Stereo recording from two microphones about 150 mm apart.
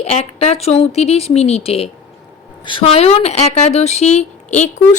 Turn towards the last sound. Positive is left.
turn(degrees=55)  # may be behind; listen again after turning